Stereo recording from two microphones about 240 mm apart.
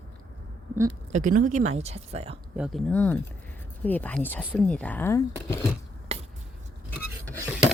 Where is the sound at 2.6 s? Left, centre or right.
Centre.